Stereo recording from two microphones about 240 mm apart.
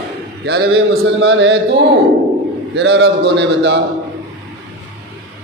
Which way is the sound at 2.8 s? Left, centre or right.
Right.